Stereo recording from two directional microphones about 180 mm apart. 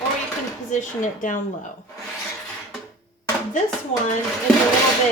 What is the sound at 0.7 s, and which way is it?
Speech, 45° left (ahead or behind).